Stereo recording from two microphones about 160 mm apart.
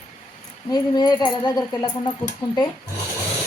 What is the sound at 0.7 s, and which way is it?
Speech, 25° left (ahead or behind).